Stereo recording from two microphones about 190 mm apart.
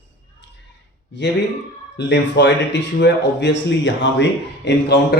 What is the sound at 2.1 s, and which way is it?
Speech, 70° left (ahead or behind).